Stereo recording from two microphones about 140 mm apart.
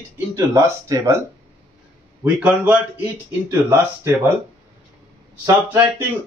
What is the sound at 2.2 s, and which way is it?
Speech, 10° right (ahead or behind).